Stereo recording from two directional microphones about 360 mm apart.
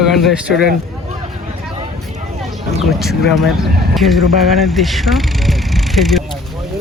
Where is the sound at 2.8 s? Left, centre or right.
Centre.